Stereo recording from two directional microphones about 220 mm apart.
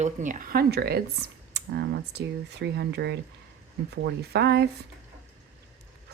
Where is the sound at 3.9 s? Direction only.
45° right (ahead or behind).